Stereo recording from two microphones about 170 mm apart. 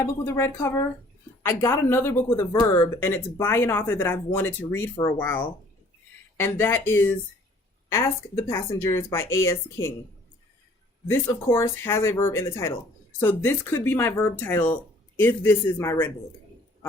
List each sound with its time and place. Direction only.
0.0 s speech: 15° left (ahead or behind)
11.1 s speech: 15° left (ahead or behind)
15.8 s speech: 15° left (ahead or behind)